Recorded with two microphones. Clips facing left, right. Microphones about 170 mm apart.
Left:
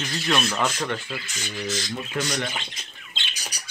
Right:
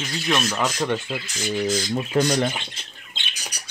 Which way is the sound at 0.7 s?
15° right (ahead or behind).